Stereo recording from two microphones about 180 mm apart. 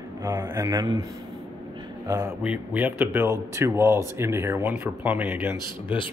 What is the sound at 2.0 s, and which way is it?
A man's voice, 15° right (ahead or behind).